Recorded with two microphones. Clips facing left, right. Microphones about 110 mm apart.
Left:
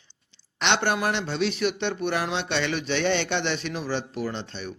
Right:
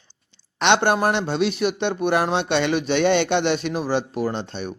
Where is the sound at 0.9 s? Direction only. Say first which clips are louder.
Right 5 dB; 40° right (ahead or behind).